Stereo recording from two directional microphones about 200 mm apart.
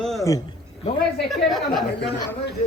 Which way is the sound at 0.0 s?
Centre (ahead or behind).